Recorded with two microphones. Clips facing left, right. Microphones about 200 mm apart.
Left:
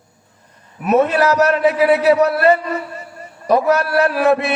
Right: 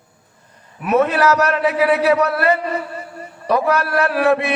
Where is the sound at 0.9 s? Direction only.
30° left (ahead or behind).